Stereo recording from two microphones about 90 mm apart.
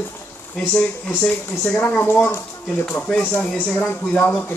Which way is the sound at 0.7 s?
10° left (ahead or behind).